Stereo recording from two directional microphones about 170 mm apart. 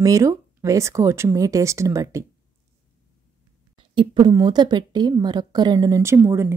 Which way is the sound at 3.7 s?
30° right (ahead or behind).